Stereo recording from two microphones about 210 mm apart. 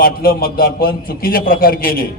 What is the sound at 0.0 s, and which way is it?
A man's voice, 45° left (ahead or behind).